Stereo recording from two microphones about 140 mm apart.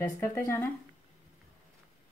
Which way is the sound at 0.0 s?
15° left (ahead or behind).